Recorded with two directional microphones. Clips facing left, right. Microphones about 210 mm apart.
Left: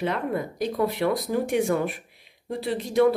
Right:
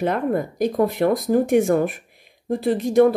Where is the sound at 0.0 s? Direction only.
45° right (ahead or behind).